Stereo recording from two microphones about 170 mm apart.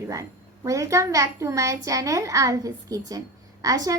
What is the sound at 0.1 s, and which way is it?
A woman's voice, 20° right (ahead or behind).